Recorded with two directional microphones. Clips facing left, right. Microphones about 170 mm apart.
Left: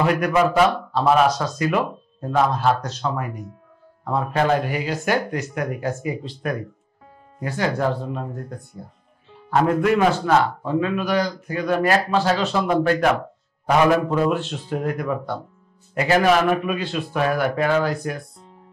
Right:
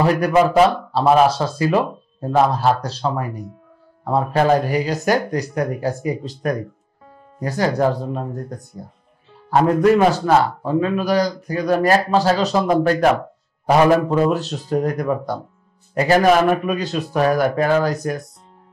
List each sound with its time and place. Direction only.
0.0 s a man's voice: 35° right (ahead or behind)